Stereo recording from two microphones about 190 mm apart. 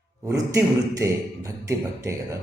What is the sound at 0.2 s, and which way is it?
A man's voice, 15° right (ahead or behind).